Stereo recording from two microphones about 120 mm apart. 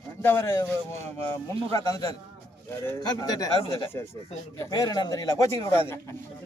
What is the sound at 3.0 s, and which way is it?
Speech, 35° left (ahead or behind).